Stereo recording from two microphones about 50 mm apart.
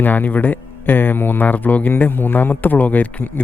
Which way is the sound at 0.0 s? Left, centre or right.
Left.